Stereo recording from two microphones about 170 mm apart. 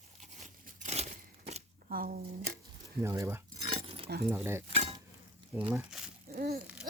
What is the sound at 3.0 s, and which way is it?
Speech, 15° right (ahead or behind).